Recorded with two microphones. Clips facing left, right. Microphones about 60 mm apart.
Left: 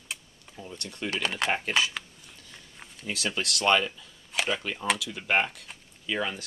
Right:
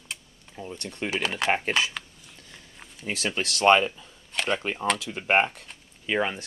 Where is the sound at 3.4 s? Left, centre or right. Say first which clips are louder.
Right 5 dB; right.